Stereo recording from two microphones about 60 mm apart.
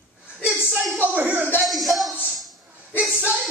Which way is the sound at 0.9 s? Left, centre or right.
Right.